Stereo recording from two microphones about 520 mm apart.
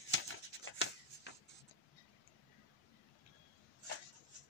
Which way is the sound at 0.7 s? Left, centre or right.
Left.